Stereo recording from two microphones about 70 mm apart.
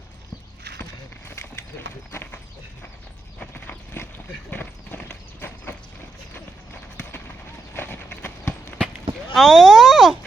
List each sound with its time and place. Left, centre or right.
5.0 s horse: left
7.7 s clip-clop: left
9.3 s speech: centre